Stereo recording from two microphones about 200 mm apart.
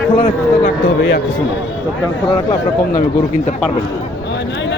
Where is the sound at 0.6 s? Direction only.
55° left (ahead or behind).